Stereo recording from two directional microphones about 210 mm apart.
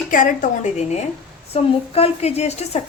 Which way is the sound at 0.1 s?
40° left (ahead or behind).